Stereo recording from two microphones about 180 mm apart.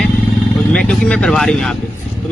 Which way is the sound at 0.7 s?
5° left (ahead or behind).